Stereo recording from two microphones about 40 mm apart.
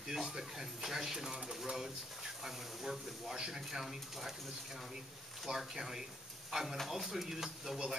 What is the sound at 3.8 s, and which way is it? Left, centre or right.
Speech, centre.